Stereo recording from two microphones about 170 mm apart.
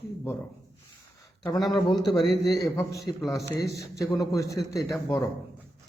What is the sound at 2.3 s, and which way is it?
A man's voice, 20° left (ahead or behind).